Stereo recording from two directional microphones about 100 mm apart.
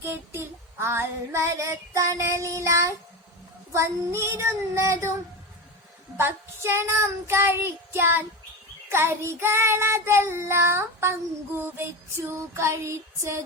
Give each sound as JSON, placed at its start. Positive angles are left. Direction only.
{"t": 0.0, "sound": "child singing", "side_deg": -25}
{"t": 6.1, "sound": "child singing", "side_deg": -25}